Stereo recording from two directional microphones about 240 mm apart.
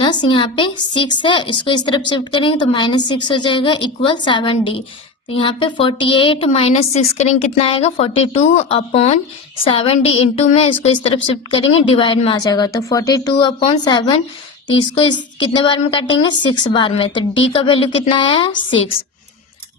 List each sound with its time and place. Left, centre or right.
0.0 s a woman's voice: centre